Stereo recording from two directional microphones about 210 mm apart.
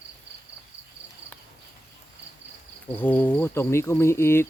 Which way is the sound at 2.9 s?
10° left (ahead or behind).